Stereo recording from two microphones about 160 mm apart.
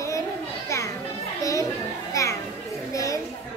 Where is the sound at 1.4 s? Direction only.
20° left (ahead or behind).